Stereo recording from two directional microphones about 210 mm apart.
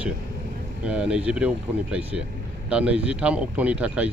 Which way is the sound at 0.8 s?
5° right (ahead or behind).